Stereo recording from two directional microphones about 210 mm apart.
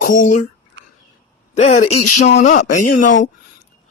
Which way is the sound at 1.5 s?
30° left (ahead or behind).